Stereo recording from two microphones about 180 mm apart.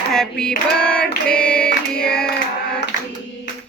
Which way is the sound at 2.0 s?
5° left (ahead or behind).